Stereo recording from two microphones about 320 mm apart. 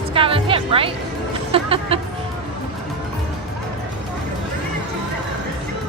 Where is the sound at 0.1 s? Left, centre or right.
Centre.